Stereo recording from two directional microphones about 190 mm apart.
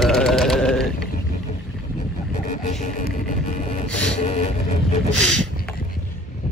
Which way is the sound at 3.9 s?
5° left (ahead or behind).